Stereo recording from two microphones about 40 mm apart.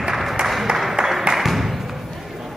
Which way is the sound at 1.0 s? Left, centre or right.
Right.